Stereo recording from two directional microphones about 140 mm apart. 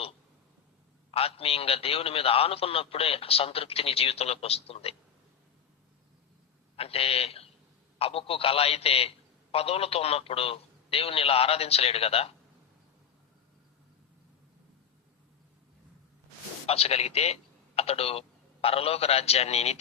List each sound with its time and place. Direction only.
1.1 s a man's voice: 45° left (ahead or behind)
6.7 s a man's voice: 45° left (ahead or behind)
16.6 s speech: 45° left (ahead or behind)